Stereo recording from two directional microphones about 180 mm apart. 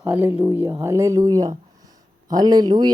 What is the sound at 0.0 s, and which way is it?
Speech, 10° right (ahead or behind).